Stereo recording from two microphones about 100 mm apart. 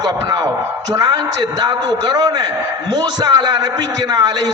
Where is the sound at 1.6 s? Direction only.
40° right (ahead or behind).